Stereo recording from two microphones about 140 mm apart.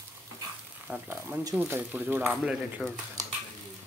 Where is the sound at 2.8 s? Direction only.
Centre (ahead or behind).